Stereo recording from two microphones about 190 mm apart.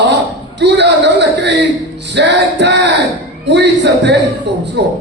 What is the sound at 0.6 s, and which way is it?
A man's voice, 65° right (ahead or behind).